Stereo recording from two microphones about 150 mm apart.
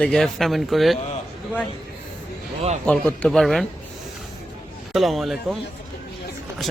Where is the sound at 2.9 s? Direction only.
5° left (ahead or behind).